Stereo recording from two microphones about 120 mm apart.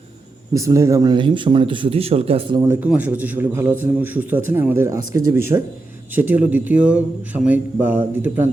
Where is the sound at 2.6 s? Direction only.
20° right (ahead or behind).